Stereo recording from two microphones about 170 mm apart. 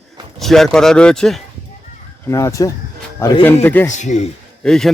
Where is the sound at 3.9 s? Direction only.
45° left (ahead or behind).